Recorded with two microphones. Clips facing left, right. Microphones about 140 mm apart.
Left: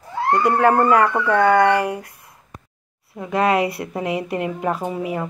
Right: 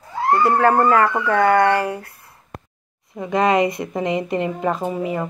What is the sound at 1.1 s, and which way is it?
Speech, centre (ahead or behind).